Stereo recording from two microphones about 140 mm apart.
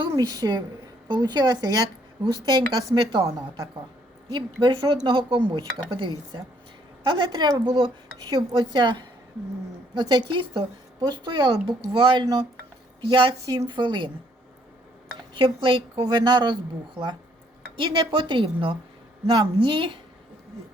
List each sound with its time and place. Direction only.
0.0 s a woman's voice: 25° right (ahead or behind)
4.3 s a woman's voice: 30° right (ahead or behind)
15.4 s a woman's voice: 30° right (ahead or behind)
17.7 s a woman's voice: 35° right (ahead or behind)